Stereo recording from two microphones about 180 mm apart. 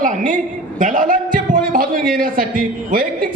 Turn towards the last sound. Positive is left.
turn(degrees=-55)  # may be behind; listen again after turning